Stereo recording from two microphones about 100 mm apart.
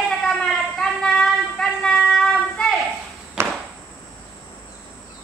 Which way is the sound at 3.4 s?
25° right (ahead or behind).